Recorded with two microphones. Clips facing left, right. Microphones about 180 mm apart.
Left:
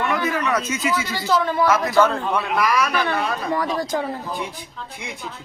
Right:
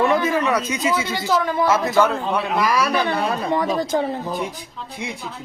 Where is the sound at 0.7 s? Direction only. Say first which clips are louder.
Right 2 dB; 25° right (ahead or behind).